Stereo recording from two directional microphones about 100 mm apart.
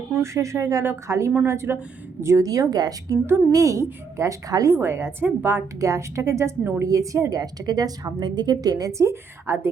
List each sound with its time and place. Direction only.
0.1 s speech: 30° right (ahead or behind)
2.2 s a woman's voice: 35° right (ahead or behind)